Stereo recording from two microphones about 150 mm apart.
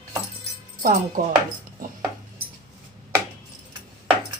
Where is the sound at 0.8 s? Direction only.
65° right (ahead or behind).